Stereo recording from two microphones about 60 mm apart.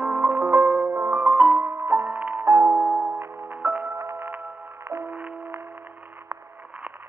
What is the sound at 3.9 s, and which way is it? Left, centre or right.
Music, right.